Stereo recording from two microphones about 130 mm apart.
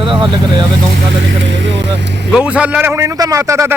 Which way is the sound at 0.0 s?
40° right (ahead or behind).